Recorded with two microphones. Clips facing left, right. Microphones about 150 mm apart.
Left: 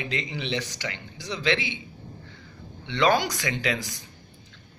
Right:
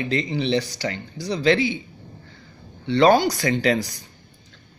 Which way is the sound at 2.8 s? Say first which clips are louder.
Right 7 dB; 35° right (ahead or behind).